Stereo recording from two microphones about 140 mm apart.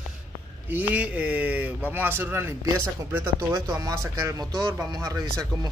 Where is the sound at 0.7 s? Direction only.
10° right (ahead or behind).